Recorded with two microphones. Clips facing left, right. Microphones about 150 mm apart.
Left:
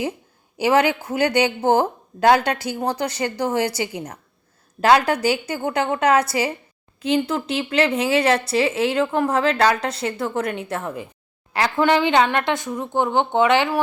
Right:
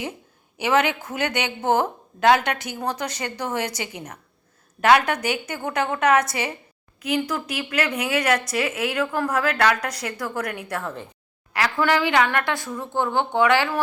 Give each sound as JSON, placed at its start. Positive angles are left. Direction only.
{"t": 0.5, "sound": "a woman's voice", "side_deg": 30}